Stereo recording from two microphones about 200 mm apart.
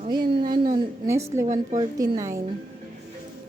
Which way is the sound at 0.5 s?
45° right (ahead or behind).